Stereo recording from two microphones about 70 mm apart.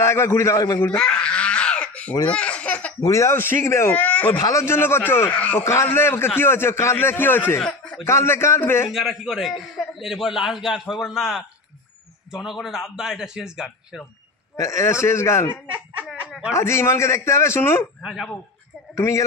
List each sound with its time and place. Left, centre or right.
0.0 s a man's voice: left
0.9 s a sound: centre
2.2 s baby laughter: centre
3.0 s a man's voice: left
3.9 s speech: left
4.4 s a man's voice: left
5.3 s speech: left
5.6 s a man's voice: left
8.9 s a man's voice: centre
14.6 s a man's voice: left
16.5 s a man's voice: left
18.0 s a man's voice: centre
18.9 s speech: left